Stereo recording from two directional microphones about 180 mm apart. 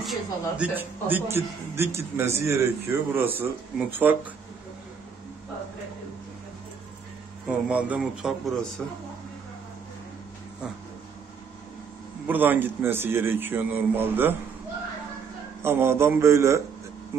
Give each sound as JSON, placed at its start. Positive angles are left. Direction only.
{"t": 0.0, "sound": "a man's voice", "side_deg": 0}
{"t": 0.7, "sound": "a man's voice", "side_deg": -10}
{"t": 7.4, "sound": "a man's voice", "side_deg": -10}
{"t": 12.3, "sound": "a man's voice", "side_deg": -10}
{"t": 15.6, "sound": "a man's voice", "side_deg": -15}